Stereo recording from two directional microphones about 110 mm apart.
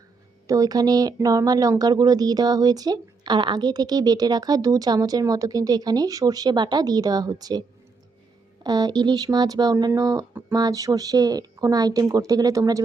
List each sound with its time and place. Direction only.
0.4 s speech: 35° right (ahead or behind)
8.6 s speech: 40° right (ahead or behind)